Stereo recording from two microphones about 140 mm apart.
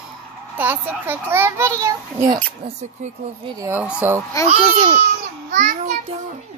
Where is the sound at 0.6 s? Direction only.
15° right (ahead or behind).